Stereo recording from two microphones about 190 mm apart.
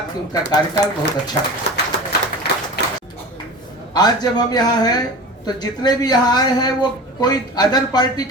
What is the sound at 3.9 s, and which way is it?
Speech, 20° left (ahead or behind).